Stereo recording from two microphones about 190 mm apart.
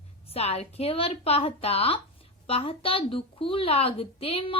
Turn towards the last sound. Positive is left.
turn(degrees=30)  # may be behind; listen again after turning